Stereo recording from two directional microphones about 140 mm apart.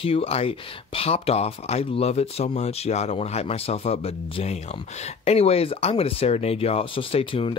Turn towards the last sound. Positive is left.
turn(degrees=40)  # may be behind; listen again after turning